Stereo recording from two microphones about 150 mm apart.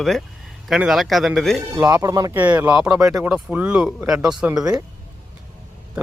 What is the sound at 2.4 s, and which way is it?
Speech, 10° right (ahead or behind).